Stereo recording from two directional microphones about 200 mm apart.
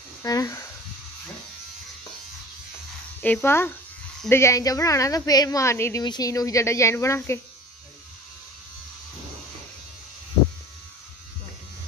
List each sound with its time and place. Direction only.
0.2 s a woman's voice: 15° left (ahead or behind)
3.2 s a woman's voice: 10° left (ahead or behind)